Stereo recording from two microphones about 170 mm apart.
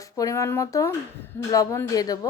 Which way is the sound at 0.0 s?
20° left (ahead or behind).